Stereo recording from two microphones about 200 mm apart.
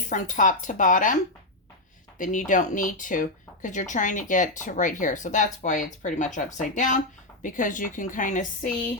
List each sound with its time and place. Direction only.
0.1 s speech: 40° left (ahead or behind)